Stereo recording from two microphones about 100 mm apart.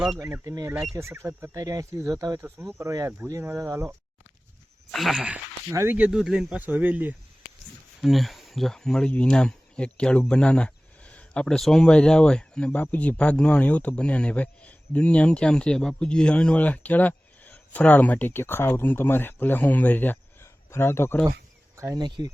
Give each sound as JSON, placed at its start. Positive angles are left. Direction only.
{"t": 0.4, "sound": "speech", "side_deg": -35}
{"t": 1.5, "sound": "speech", "side_deg": -35}
{"t": 2.4, "sound": "speech", "side_deg": -25}
{"t": 4.9, "sound": "speech", "side_deg": 0}
{"t": 5.7, "sound": "speech", "side_deg": -25}
{"t": 6.0, "sound": "speech", "side_deg": -5}
{"t": 6.6, "sound": "speech", "side_deg": -15}
{"t": 8.0, "sound": "speech", "side_deg": 0}
{"t": 21.8, "sound": "speech", "side_deg": -35}
{"t": 22.0, "sound": "speech", "side_deg": -50}